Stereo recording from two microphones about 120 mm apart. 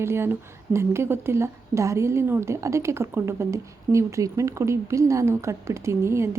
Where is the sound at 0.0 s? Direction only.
20° right (ahead or behind).